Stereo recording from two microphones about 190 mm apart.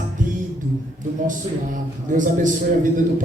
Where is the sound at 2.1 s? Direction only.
45° right (ahead or behind).